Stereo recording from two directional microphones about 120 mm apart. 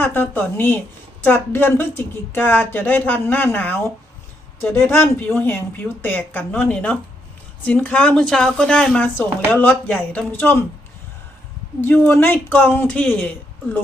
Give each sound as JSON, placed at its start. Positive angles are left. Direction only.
{"t": 0.0, "sound": "speech", "side_deg": 15}
{"t": 11.8, "sound": "a woman's voice", "side_deg": 15}